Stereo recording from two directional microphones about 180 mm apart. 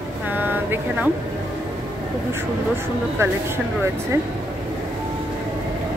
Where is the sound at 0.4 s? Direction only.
10° right (ahead or behind).